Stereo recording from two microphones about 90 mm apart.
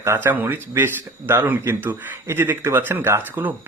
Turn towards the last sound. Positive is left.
turn(degrees=-20)  # may be behind; listen again after turning